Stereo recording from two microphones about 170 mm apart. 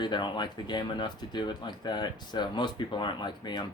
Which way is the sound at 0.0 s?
25° left (ahead or behind).